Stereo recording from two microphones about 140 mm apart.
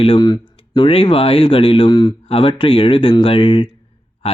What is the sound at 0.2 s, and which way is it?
Speech, 30° left (ahead or behind).